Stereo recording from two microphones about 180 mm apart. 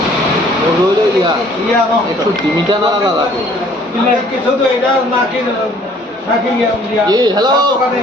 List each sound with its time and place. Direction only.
7.1 s a man's voice: 20° right (ahead or behind)